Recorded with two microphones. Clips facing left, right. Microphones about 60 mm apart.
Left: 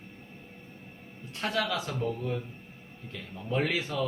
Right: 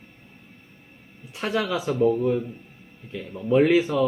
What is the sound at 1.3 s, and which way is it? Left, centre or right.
Speech, centre.